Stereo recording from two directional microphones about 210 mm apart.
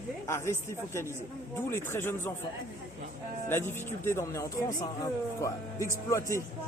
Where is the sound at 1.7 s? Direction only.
10° left (ahead or behind).